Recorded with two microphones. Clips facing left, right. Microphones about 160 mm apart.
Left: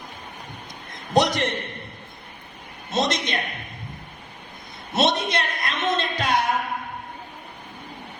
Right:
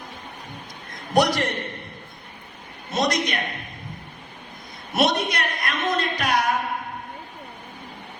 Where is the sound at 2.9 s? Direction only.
25° left (ahead or behind).